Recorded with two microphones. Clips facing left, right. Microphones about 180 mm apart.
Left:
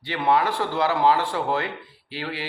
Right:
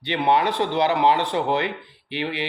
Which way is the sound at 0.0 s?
20° right (ahead or behind).